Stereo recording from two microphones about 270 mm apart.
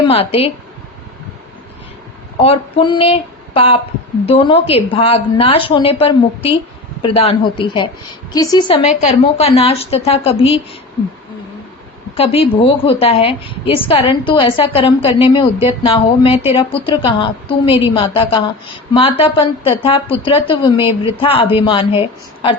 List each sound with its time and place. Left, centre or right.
0.0 s a sound: left
2.4 s a woman's voice: left
12.1 s a woman's voice: left